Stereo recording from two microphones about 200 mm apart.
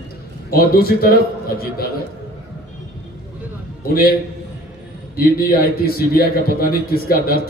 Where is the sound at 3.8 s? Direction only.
50° left (ahead or behind).